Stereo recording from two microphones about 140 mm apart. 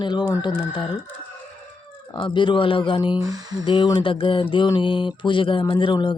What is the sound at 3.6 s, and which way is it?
Mantra, 35° left (ahead or behind).